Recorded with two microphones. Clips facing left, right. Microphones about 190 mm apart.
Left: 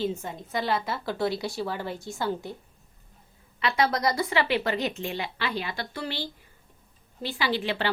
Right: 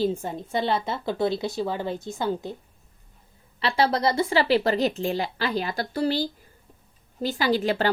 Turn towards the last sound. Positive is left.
turn(degrees=-40)  # may be behind; listen again after turning